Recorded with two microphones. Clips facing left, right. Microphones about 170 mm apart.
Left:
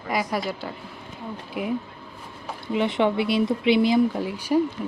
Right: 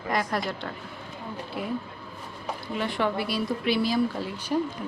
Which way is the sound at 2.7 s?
20° left (ahead or behind).